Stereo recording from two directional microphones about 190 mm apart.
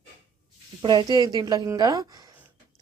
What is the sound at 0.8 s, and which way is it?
Speech, 25° right (ahead or behind).